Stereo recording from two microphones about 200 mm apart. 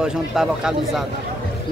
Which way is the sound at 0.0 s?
5° right (ahead or behind).